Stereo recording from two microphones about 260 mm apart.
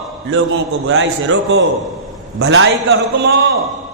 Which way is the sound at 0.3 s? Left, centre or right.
Right.